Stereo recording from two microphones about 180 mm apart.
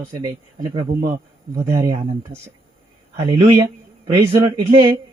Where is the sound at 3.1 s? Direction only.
30° right (ahead or behind).